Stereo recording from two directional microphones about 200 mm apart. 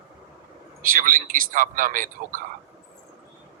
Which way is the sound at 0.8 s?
40° right (ahead or behind).